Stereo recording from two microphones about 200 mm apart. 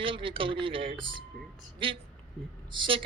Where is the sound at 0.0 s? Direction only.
25° right (ahead or behind).